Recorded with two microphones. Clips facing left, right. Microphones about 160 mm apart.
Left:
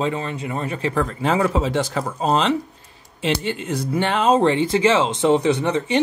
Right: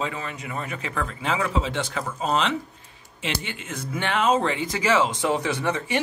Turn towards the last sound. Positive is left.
turn(degrees=20)  # may be behind; listen again after turning